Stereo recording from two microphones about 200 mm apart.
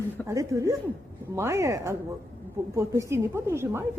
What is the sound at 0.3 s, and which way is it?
A woman's voice, 15° right (ahead or behind).